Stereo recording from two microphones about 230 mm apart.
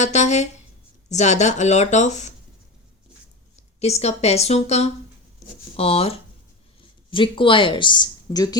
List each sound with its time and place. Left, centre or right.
0.0 s speech: left
3.5 s speech: left